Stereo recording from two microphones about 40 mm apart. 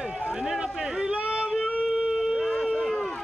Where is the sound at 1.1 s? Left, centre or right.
Right.